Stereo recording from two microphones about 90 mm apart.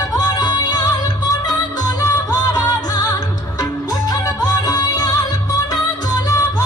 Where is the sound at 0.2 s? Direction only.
50° left (ahead or behind).